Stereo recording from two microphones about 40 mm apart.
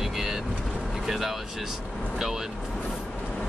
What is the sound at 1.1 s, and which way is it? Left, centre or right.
Speech, centre.